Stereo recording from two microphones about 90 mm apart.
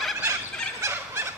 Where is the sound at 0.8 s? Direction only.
30° right (ahead or behind).